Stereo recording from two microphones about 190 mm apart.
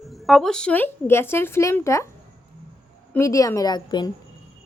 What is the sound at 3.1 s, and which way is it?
Speech, 15° left (ahead or behind).